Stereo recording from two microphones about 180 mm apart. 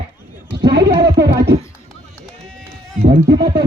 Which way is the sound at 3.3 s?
65° right (ahead or behind).